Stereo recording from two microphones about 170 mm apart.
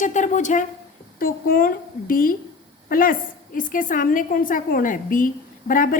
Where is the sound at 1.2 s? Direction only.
55° left (ahead or behind).